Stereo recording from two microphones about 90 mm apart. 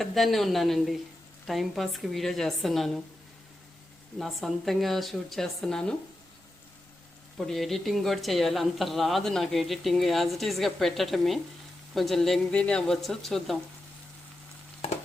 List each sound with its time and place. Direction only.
0.0 s speech: centre (ahead or behind)
4.2 s speech: centre (ahead or behind)
7.3 s speech: 5° left (ahead or behind)